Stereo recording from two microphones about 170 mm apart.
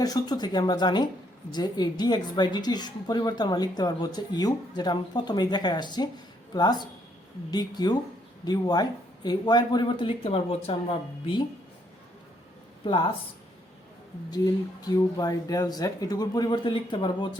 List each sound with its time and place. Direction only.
0.0 s a woman's voice: 25° left (ahead or behind)
12.8 s speech: 30° left (ahead or behind)
14.3 s a woman's voice: 20° left (ahead or behind)